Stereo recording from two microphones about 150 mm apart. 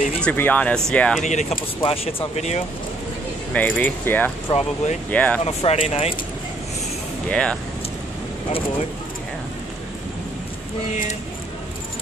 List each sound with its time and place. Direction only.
0.2 s speech: 10° left (ahead or behind)
1.2 s speech: 50° left (ahead or behind)
1.8 s speech: 40° left (ahead or behind)
3.5 s speech: 10° left (ahead or behind)
4.5 s speech: 40° left (ahead or behind)
5.1 s speech: 10° left (ahead or behind)
5.4 s speech: 45° left (ahead or behind)
7.2 s speech: 5° left (ahead or behind)